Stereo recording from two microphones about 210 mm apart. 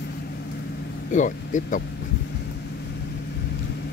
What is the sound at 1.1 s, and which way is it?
Speech, 40° left (ahead or behind).